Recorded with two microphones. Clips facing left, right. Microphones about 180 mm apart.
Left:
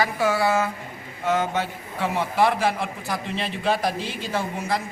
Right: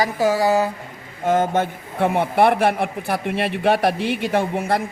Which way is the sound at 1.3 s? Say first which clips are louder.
Right 5 dB; 50° right (ahead or behind).